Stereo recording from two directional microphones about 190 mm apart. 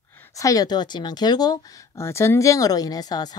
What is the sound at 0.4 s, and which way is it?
Speech, 20° left (ahead or behind).